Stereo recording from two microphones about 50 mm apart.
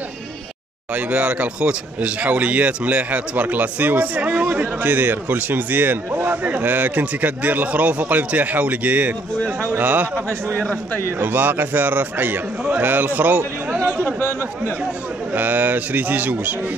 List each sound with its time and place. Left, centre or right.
0.9 s speech: right
15.3 s speech: right